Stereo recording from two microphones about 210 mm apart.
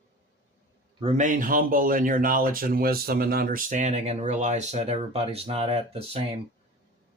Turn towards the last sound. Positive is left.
turn(degrees=-30)  # may be behind; listen again after turning